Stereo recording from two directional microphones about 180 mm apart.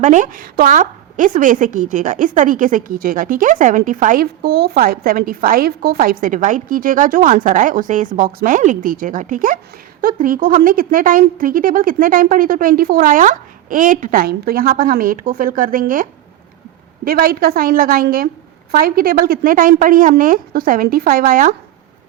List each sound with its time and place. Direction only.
0.0 s a woman's voice: 45° right (ahead or behind)